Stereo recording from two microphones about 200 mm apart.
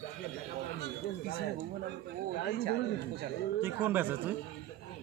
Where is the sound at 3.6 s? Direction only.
10° right (ahead or behind).